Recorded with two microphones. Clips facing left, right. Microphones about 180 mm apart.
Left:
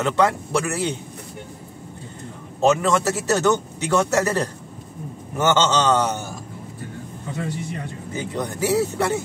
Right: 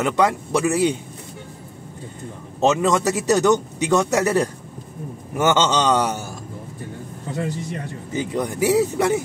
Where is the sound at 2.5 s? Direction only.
20° right (ahead or behind).